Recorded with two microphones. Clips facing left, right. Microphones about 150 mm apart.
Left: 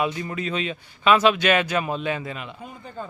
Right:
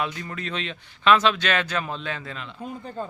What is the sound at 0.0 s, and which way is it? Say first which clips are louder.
Speech: left 4 dB; 10° left (ahead or behind).